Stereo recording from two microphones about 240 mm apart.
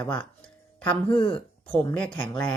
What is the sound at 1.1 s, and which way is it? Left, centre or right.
Speech, left.